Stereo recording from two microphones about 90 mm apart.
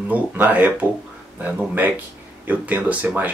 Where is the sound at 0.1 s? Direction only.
20° right (ahead or behind).